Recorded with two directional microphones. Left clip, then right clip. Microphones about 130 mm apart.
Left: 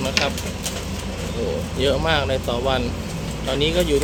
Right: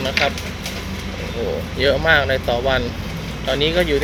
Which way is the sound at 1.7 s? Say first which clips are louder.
Right 5 dB; 10° left (ahead or behind).